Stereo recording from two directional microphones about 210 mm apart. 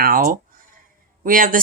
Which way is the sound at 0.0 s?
45° right (ahead or behind).